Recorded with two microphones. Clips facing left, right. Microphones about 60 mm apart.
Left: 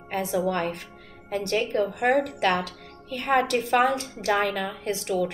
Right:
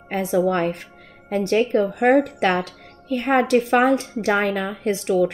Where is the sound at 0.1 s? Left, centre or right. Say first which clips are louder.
Right 6 dB; right.